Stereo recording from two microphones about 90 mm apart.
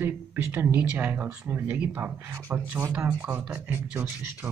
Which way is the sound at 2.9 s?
15° right (ahead or behind).